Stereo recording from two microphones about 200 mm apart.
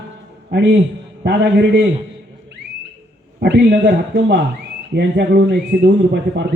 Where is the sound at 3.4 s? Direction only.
55° right (ahead or behind).